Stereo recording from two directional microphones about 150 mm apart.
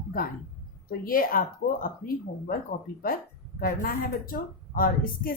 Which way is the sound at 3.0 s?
75° left (ahead or behind).